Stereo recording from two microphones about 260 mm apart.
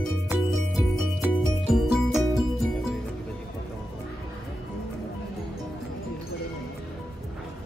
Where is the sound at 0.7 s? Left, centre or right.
Centre.